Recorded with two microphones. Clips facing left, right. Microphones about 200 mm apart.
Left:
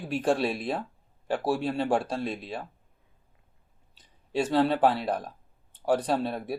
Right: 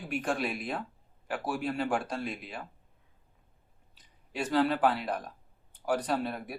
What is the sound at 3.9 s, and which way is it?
Speech, 30° left (ahead or behind).